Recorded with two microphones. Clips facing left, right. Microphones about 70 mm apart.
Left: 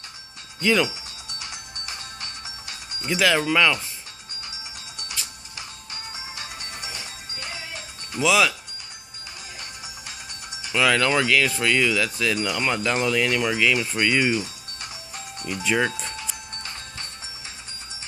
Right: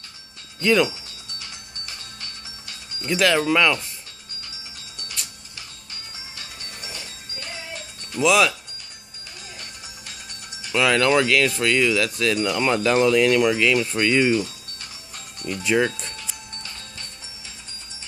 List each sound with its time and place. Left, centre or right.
0.7 s speech: centre
1.4 s music: left
3.2 s speech: centre
4.5 s music: centre
6.3 s music: left
7.7 s music: centre
9.6 s speech: centre
15.6 s speech: centre
15.9 s music: centre